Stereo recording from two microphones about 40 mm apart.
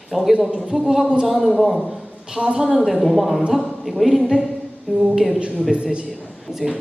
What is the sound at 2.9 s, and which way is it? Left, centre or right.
A woman's voice, centre.